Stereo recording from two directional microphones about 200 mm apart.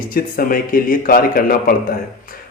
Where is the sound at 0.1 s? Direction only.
45° left (ahead or behind).